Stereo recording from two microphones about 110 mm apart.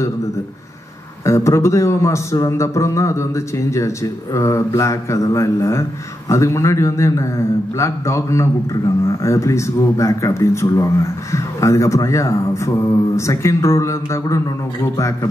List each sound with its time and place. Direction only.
1.2 s speech: 25° left (ahead or behind)